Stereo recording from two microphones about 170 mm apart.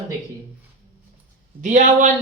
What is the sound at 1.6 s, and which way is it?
Speech, 45° right (ahead or behind).